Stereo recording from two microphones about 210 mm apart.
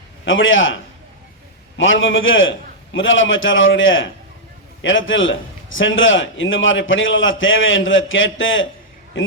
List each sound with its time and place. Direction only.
0.3 s a man's voice: 65° left (ahead or behind)
1.8 s a man's voice: 65° left (ahead or behind)